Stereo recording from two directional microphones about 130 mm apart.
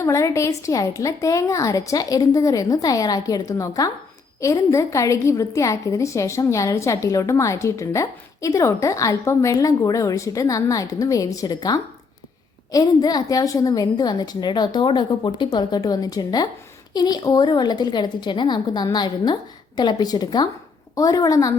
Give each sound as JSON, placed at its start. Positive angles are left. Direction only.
{"t": 0.0, "sound": "a woman's voice", "side_deg": 25}